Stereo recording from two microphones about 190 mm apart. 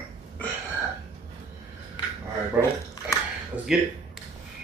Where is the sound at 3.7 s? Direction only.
5° right (ahead or behind).